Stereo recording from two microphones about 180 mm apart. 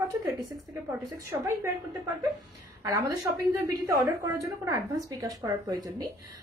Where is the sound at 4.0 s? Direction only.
15° right (ahead or behind).